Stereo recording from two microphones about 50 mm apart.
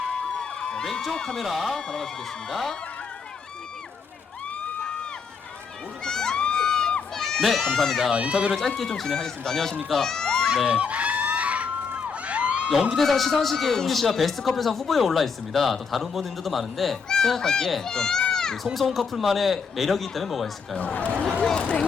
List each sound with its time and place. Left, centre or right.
0.1 s a sound: centre
0.9 s speech: centre
1.5 s a man's voice: centre
1.7 s speech: centre
4.8 s a sound: centre
6.1 s crowd: centre
8.1 s speech: right
8.8 s speech: centre
9.9 s run: centre
10.7 s crowd: right
13.0 s a man's voice: centre
18.5 s a man's voice: centre
20.7 s speech: left